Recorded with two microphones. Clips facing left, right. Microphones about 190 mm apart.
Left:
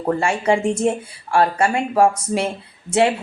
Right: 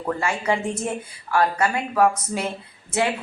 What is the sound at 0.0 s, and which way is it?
Speech, 30° left (ahead or behind).